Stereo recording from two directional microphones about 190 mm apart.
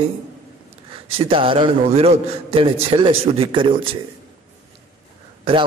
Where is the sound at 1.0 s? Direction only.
30° right (ahead or behind).